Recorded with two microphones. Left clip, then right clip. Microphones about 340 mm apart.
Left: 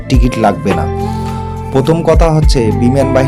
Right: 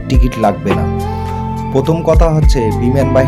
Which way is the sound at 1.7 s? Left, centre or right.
Right.